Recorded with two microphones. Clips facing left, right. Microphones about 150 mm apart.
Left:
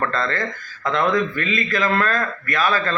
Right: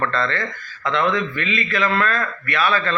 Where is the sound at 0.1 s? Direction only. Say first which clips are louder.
Even; 40° left (ahead or behind).